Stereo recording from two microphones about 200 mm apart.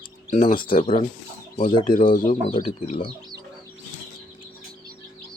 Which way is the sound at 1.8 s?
40° left (ahead or behind).